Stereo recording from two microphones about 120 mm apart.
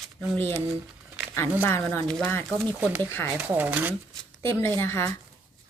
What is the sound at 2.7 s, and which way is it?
Speech, 15° right (ahead or behind).